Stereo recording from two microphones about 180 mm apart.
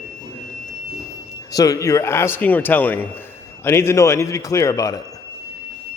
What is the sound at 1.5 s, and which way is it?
Speech, 20° left (ahead or behind).